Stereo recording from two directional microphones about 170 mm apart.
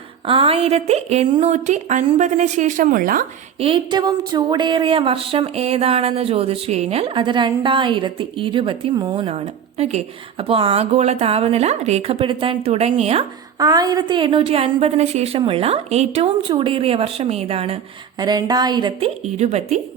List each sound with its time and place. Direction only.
0.3 s speech: 35° right (ahead or behind); by 3.2 s 55° right (ahead or behind)
3.6 s speech: 30° right (ahead or behind)
13.6 s speech: 20° right (ahead or behind)
18.2 s a woman's voice: 25° right (ahead or behind); by 19.8 s 40° right (ahead or behind)